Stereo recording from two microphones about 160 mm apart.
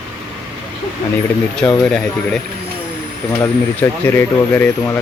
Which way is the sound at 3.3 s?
15° left (ahead or behind).